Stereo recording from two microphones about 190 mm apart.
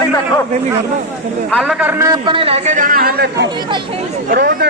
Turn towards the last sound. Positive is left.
turn(degrees=-50)  # may be behind; listen again after turning